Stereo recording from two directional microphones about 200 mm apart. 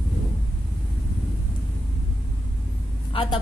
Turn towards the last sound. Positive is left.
turn(degrees=25)  # may be behind; listen again after turning